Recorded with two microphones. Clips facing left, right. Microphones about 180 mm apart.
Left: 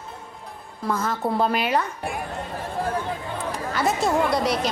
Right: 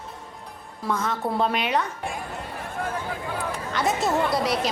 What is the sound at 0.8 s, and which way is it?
A woman's voice, centre (ahead or behind).